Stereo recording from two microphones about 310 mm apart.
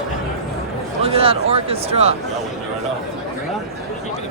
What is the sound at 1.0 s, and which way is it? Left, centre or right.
Speech, centre.